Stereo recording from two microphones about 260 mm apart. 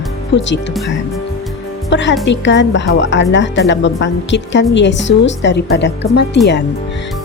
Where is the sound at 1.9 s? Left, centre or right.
Left.